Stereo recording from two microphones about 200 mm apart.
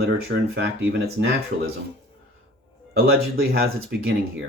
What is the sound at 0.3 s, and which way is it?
Speech, 55° right (ahead or behind).